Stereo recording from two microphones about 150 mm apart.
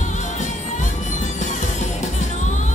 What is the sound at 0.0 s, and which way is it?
Music, 55° left (ahead or behind).